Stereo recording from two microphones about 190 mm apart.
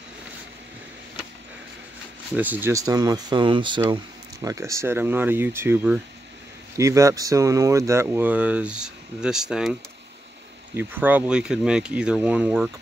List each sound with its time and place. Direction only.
2.3 s speech: 10° right (ahead or behind)
10.8 s speech: 10° right (ahead or behind)